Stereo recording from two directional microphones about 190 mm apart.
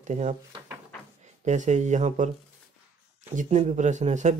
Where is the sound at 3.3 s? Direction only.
40° right (ahead or behind).